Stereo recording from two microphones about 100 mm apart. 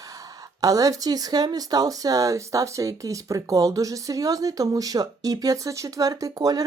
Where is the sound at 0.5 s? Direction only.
35° right (ahead or behind).